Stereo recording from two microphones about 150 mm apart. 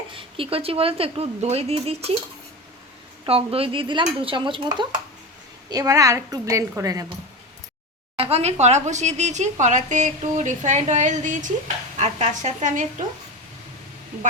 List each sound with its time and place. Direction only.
0.1 s a woman's voice: 35° right (ahead or behind)
3.2 s a woman's voice: 40° right (ahead or behind); by 7.1 s 20° right (ahead or behind)
8.1 s speech: 40° right (ahead or behind)